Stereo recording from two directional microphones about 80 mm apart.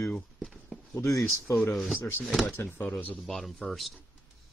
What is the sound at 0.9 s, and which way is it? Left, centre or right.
Speech, left.